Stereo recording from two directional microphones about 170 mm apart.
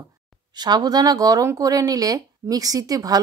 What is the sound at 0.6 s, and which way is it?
A woman's voice, 25° right (ahead or behind).